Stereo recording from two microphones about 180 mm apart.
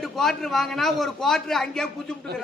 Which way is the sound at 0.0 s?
Centre (ahead or behind).